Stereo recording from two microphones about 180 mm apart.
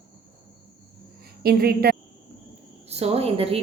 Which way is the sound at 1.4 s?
60° right (ahead or behind).